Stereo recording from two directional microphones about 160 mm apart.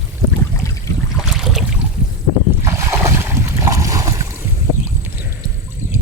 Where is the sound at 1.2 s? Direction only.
Centre (ahead or behind).